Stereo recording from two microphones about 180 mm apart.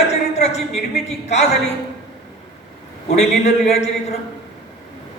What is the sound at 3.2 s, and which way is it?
Speech, 40° left (ahead or behind).